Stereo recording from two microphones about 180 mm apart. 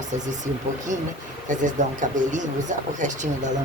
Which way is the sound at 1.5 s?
45° right (ahead or behind).